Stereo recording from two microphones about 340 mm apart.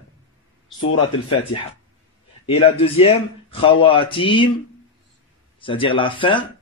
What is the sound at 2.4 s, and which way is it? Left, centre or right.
Speech, centre.